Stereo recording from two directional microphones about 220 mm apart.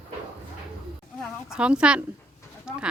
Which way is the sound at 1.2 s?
5° right (ahead or behind).